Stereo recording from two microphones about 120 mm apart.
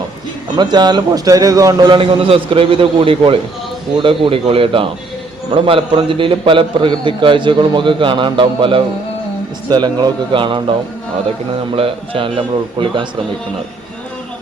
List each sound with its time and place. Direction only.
0.5 s a man's voice: 35° right (ahead or behind)
2.0 s a man's voice: 50° right (ahead or behind)
11.7 s a man's voice: 45° right (ahead or behind)